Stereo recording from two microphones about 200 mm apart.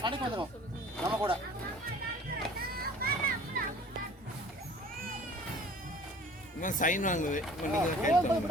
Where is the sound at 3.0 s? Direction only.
50° right (ahead or behind).